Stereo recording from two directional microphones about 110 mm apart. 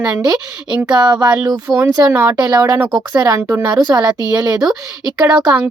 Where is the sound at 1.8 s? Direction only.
20° right (ahead or behind).